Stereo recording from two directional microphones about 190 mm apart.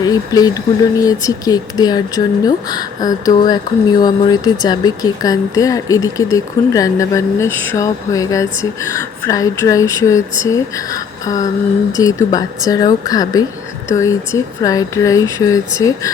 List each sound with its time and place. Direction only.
0.0 s speech: 20° left (ahead or behind)